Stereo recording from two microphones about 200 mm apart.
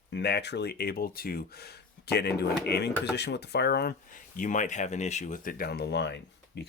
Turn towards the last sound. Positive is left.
turn(degrees=60)  # may be behind; listen again after turning